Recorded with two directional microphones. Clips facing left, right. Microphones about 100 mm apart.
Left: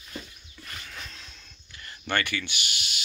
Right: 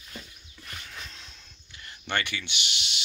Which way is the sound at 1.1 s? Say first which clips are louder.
Left 1 dB; 20° right (ahead or behind).